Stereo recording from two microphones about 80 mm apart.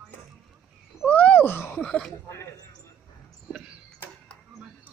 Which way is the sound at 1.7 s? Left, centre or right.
Centre.